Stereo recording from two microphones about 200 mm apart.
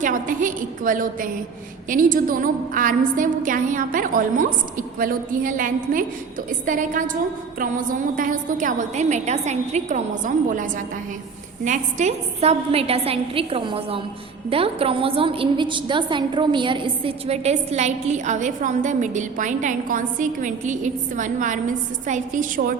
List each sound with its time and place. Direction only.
0.0 s a woman's voice: 40° right (ahead or behind)